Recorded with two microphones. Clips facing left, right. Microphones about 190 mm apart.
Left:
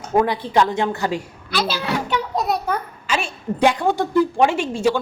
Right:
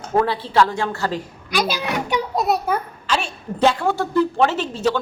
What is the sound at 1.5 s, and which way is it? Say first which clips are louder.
Speech: right 1 dB; 15° right (ahead or behind).